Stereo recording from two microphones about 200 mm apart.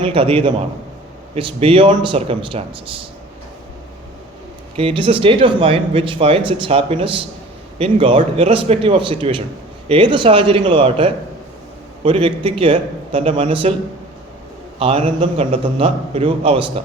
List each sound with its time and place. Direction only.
0.0 s speech: 25° right (ahead or behind)
4.8 s speech: 25° right (ahead or behind)
14.8 s speech: 25° right (ahead or behind)